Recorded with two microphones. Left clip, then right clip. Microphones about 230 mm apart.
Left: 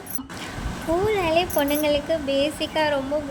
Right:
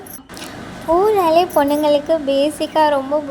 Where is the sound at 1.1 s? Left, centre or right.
Centre.